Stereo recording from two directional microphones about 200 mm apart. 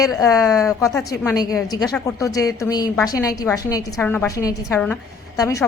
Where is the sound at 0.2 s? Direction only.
15° left (ahead or behind).